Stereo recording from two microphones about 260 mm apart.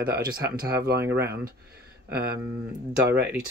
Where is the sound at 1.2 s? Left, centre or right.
Right.